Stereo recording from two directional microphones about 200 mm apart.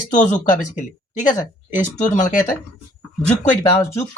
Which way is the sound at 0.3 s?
40° left (ahead or behind).